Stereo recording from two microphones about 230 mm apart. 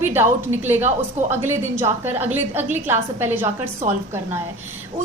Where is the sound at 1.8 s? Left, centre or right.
Centre.